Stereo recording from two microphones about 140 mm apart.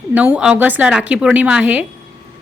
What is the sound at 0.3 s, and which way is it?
A woman's voice, 10° right (ahead or behind).